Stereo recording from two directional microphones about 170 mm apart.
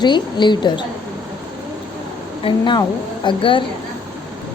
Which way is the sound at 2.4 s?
25° left (ahead or behind).